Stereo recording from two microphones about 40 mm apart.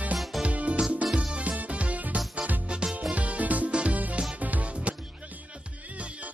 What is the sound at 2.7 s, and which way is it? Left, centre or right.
Music, right.